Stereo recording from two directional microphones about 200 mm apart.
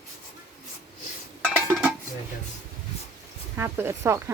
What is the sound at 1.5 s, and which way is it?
Dishes, 5° right (ahead or behind).